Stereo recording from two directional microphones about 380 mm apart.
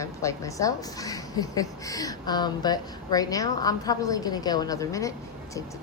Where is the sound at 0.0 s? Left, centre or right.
Centre.